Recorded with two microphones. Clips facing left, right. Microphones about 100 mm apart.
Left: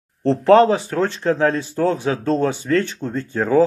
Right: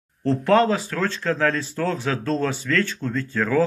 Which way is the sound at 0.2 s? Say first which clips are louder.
Left 6 dB; 30° left (ahead or behind).